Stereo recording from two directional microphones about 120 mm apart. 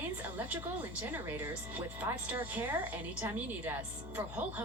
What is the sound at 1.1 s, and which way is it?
Speech, 15° right (ahead or behind).